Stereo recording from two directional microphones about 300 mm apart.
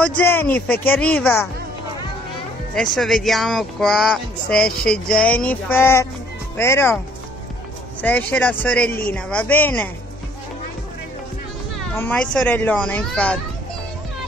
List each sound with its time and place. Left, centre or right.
0.0 s speech: centre
2.7 s speech: centre
8.0 s speech: centre
11.8 s speech: centre